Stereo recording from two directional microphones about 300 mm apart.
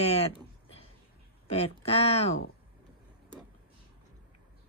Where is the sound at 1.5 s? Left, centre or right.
Left.